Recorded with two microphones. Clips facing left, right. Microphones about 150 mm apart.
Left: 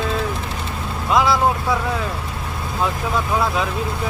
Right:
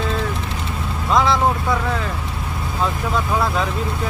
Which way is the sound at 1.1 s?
5° left (ahead or behind).